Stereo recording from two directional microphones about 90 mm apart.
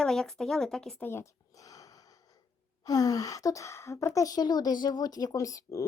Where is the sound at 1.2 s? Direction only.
40° left (ahead or behind).